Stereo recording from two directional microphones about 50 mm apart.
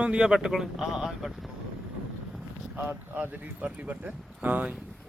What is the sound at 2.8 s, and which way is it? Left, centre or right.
Speech, right.